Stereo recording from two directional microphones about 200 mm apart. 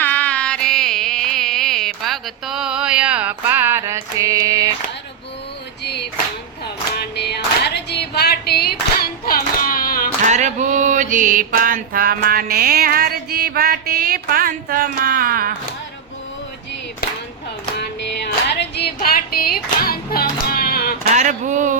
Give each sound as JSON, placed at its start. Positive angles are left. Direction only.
{"t": 0.0, "sound": "music", "side_deg": 10}
{"t": 5.8, "sound": "clapping", "side_deg": 55}
{"t": 6.9, "sound": "a sound", "side_deg": 55}
{"t": 10.2, "sound": "mantra", "side_deg": -35}
{"t": 17.7, "sound": "music", "side_deg": 55}
{"t": 21.1, "sound": "speech", "side_deg": -35}